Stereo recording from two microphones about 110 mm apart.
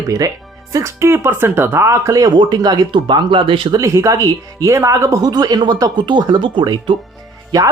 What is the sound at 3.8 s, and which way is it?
Speech, 25° right (ahead or behind).